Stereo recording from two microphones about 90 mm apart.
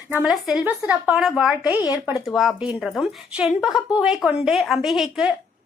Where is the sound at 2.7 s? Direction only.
5° left (ahead or behind).